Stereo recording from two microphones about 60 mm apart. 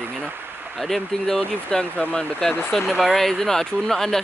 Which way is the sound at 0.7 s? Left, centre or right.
Centre.